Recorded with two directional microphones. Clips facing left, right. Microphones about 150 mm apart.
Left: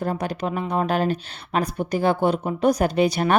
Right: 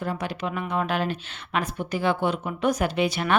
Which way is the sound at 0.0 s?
40° left (ahead or behind).